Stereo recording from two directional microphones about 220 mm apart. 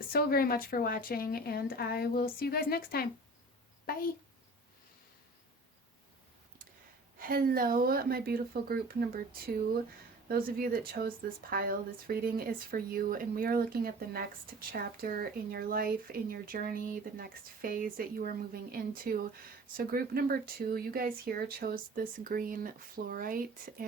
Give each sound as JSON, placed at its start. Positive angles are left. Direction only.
{"t": 0.1, "sound": "a woman's voice", "side_deg": 45}
{"t": 7.2, "sound": "speech", "side_deg": -40}
{"t": 10.2, "sound": "speech", "side_deg": -40}